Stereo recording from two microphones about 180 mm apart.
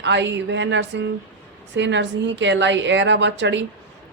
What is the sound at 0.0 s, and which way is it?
A woman's voice, 80° right.